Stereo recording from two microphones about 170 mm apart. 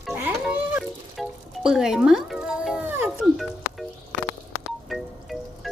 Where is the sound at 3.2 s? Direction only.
Centre (ahead or behind).